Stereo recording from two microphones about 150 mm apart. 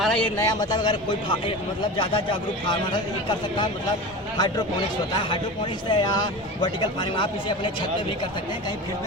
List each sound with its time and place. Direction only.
0.0 s a sound: 5° left (ahead or behind)
0.3 s speech: 25° left (ahead or behind)
4.4 s speech: 25° left (ahead or behind)
5.9 s speech: 30° left (ahead or behind)